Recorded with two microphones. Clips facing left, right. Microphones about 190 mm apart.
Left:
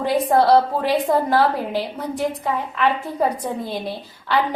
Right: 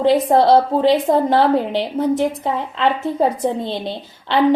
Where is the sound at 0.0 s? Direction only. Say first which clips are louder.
Right 4 dB; 25° right (ahead or behind).